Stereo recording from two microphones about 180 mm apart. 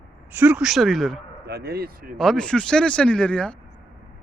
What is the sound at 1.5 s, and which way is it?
Speech, 60° right (ahead or behind).